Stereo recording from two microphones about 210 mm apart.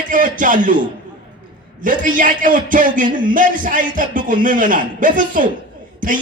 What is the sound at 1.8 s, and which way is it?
A man's voice, 40° right (ahead or behind).